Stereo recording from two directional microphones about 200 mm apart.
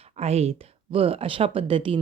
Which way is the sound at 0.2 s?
30° right (ahead or behind).